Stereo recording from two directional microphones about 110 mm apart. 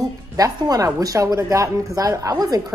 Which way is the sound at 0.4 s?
30° right (ahead or behind).